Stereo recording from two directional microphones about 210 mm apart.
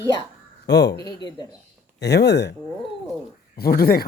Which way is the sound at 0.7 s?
55° left (ahead or behind).